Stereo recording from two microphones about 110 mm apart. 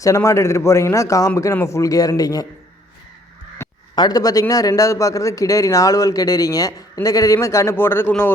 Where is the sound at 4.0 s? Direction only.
35° left (ahead or behind); by 8.3 s 20° left (ahead or behind).